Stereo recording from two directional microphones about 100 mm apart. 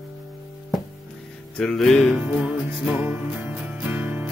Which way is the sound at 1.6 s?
10° left (ahead or behind).